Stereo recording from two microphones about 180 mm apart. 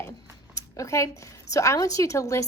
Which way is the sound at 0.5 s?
15° left (ahead or behind).